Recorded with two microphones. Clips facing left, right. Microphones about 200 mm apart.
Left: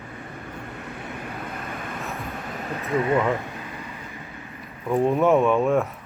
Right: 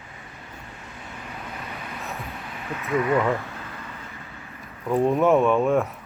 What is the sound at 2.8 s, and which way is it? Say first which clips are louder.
Speech: even; 30° left (ahead or behind).